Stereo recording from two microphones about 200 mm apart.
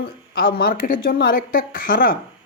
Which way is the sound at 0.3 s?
50° left (ahead or behind).